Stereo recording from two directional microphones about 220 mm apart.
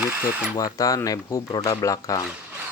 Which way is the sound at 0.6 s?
15° left (ahead or behind).